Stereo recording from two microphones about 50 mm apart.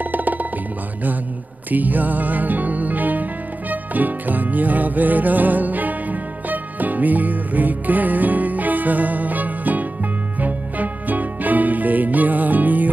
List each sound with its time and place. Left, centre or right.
0.0 s music: right
1.7 s music: right